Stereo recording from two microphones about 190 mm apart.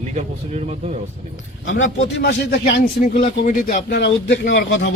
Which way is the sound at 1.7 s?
90° left.